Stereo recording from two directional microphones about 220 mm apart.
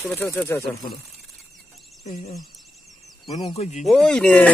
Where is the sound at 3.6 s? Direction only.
30° left (ahead or behind).